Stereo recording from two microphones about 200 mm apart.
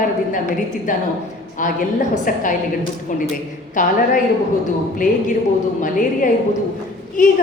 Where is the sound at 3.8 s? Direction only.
40° left (ahead or behind).